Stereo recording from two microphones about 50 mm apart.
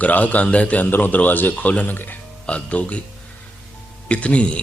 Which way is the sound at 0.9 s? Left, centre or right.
Left.